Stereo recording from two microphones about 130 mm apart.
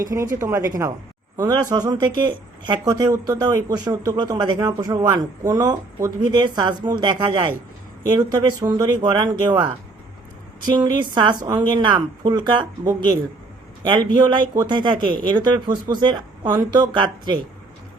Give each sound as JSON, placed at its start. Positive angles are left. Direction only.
{"t": 0.0, "sound": "speech", "side_deg": -25}
{"t": 10.7, "sound": "speech", "side_deg": -35}
{"t": 13.8, "sound": "speech", "side_deg": -35}